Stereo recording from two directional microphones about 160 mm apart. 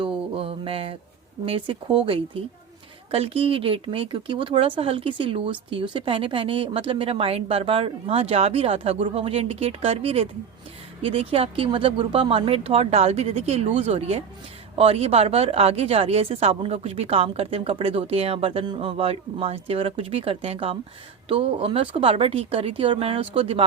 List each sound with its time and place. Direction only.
0.3 s mantra: 35° right (ahead or behind)
1.5 s speech: 35° right (ahead or behind)